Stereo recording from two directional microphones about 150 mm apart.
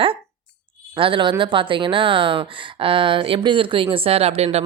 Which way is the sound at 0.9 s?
35° right (ahead or behind).